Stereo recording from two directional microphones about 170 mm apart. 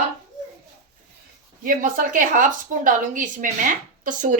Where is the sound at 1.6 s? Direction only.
55° right (ahead or behind).